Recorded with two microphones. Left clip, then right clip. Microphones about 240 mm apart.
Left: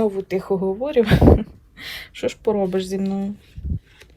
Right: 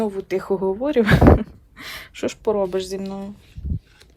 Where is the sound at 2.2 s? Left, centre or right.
Right.